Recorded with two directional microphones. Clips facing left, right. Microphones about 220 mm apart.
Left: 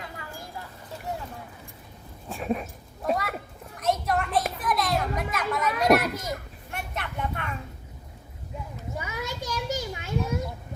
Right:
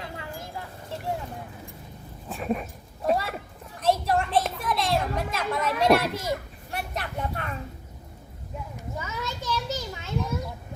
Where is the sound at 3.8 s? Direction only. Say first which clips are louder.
Right 2 dB; 30° right (ahead or behind).